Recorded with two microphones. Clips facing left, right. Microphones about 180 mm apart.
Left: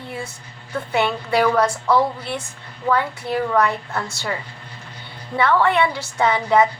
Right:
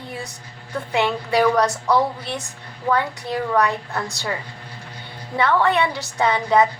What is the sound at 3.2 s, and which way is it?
A woman's voice, 20° right (ahead or behind).